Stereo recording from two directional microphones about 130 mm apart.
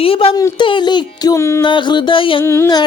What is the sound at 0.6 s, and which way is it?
Child singing, 35° left (ahead or behind).